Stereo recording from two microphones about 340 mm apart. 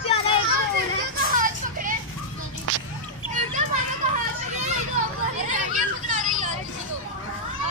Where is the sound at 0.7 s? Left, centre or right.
Right.